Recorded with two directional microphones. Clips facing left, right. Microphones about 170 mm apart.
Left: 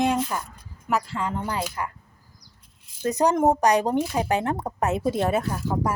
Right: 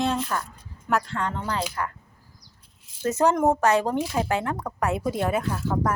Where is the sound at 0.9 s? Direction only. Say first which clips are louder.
Even; 5° left (ahead or behind).